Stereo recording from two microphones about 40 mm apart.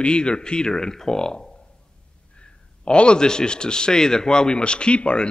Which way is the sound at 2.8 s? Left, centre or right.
Left.